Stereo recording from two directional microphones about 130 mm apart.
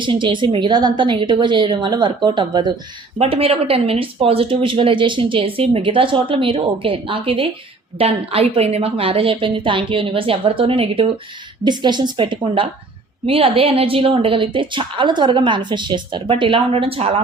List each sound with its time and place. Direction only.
0.0 s a woman's voice: 40° right (ahead or behind)
3.2 s speech: 45° right (ahead or behind)
11.6 s a woman's voice: 35° right (ahead or behind)